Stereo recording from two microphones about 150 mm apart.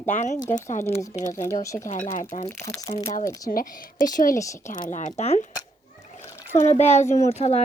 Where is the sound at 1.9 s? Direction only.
60° left (ahead or behind).